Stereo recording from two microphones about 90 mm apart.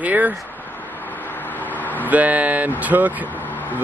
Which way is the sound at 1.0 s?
20° left (ahead or behind).